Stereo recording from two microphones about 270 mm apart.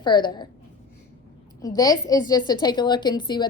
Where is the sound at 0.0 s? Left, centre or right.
Centre.